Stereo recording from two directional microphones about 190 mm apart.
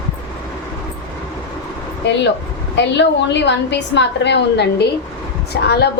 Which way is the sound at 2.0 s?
65° left (ahead or behind).